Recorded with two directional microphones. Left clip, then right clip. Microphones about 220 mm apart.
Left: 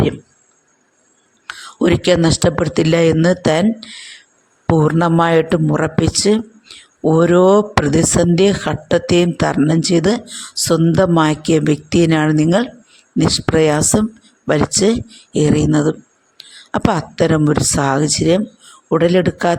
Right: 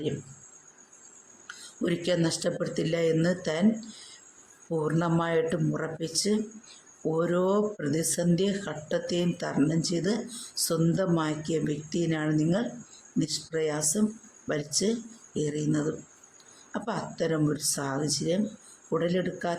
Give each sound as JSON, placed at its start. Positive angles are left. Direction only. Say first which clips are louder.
{"t": 1.5, "sound": "speech", "louder": "left 15 dB", "side_deg": 35}